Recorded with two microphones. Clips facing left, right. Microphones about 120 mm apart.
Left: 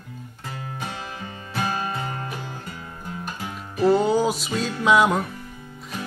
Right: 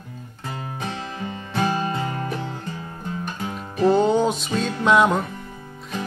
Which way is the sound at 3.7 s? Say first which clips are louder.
Right 1 dB; 20° right (ahead or behind).